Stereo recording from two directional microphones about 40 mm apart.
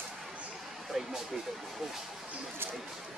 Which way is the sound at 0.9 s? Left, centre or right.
Centre.